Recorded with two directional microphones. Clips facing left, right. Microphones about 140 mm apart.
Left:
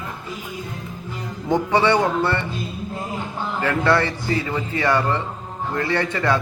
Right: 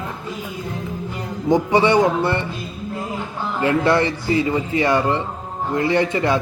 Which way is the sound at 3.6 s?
20° right (ahead or behind).